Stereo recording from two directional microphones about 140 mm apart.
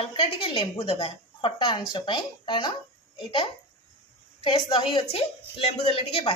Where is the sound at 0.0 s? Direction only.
40° left (ahead or behind).